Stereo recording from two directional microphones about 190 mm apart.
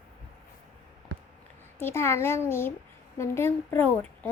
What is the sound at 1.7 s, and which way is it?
Speech, 10° left (ahead or behind).